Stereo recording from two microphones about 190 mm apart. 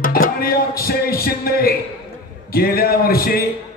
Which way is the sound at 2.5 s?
55° left (ahead or behind).